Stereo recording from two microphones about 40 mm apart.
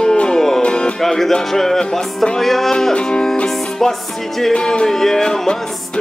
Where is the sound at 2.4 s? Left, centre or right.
Centre.